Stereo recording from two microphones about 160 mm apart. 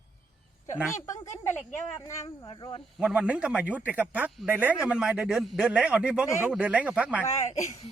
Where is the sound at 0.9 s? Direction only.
20° left (ahead or behind).